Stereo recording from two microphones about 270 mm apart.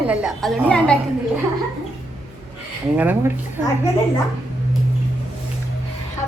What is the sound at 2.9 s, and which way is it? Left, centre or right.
Speech, centre.